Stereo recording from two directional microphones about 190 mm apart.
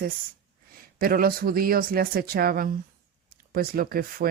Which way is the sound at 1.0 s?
50° right (ahead or behind).